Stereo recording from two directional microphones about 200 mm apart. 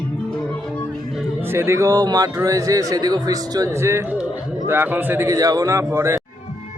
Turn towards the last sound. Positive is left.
turn(degrees=-15)  # may be behind; listen again after turning